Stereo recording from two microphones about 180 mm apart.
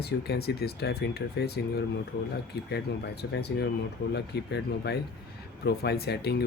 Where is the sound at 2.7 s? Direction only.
65° left (ahead or behind).